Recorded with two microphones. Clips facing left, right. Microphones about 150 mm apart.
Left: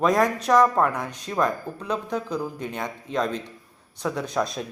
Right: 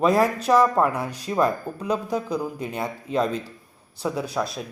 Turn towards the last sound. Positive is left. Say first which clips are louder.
# even
turn(degrees=-5)  # may be behind; listen again after turning